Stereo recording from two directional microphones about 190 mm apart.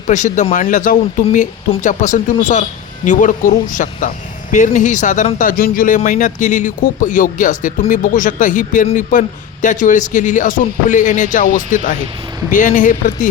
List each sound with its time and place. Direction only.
0.1 s speech: 40° left (ahead or behind)